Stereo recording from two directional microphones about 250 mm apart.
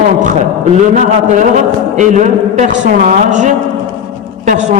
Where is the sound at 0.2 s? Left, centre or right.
Right.